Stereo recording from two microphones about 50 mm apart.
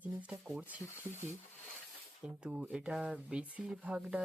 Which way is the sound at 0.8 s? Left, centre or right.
Left.